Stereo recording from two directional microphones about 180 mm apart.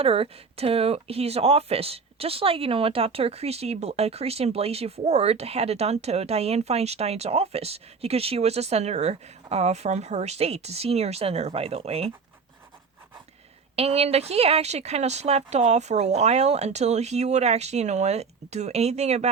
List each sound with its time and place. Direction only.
0.0 s speech: 30° right (ahead or behind)
13.7 s speech: 35° right (ahead or behind)